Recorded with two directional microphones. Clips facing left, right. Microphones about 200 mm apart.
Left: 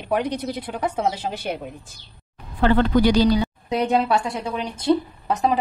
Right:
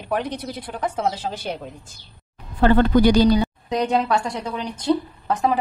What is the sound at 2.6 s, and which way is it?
Speech, 45° right (ahead or behind).